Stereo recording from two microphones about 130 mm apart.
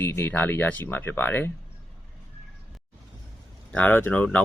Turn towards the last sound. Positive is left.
turn(degrees=15)  # may be behind; listen again after turning